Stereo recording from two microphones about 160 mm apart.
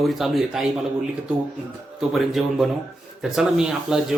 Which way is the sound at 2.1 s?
Centre (ahead or behind).